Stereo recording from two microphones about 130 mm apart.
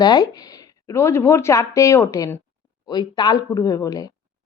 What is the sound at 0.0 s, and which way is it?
A woman's voice, 30° left (ahead or behind).